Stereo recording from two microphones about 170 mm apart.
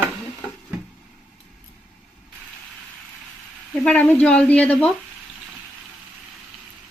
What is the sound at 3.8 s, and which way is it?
Dishes, 10° left (ahead or behind).